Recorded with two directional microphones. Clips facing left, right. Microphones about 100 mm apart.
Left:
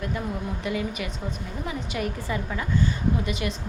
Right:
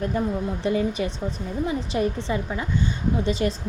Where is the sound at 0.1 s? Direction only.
35° right (ahead or behind).